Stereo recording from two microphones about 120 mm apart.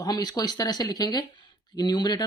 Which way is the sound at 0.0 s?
35° left (ahead or behind).